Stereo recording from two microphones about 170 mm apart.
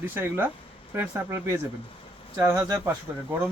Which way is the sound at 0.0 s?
10° right (ahead or behind).